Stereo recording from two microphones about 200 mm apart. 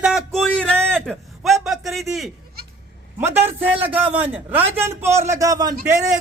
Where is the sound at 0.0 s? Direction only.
Centre (ahead or behind).